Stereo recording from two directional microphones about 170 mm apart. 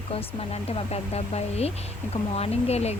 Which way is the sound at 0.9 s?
40° left (ahead or behind).